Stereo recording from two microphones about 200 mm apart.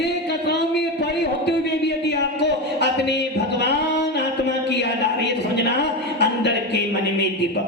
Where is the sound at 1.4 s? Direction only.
55° left (ahead or behind).